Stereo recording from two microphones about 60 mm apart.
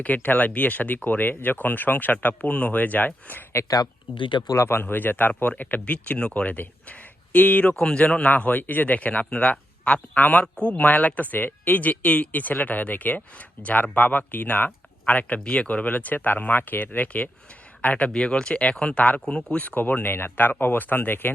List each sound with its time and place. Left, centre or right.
0.0 s speech: left
4.5 s speech: left
7.8 s speech: centre; by 21.3 s left